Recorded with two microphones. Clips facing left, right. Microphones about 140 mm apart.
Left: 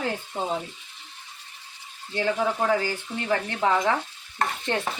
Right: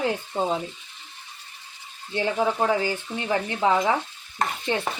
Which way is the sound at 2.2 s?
20° right (ahead or behind).